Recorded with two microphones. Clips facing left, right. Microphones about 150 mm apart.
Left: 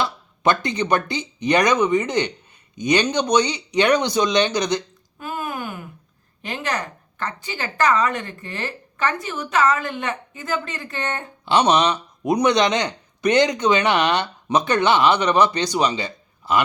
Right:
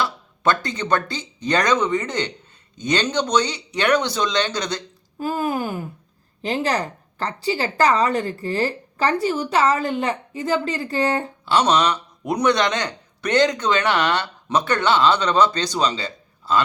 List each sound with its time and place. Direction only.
0.0 s speech: 20° left (ahead or behind)
5.2 s a woman's voice: 30° right (ahead or behind)
11.4 s speech: 15° left (ahead or behind)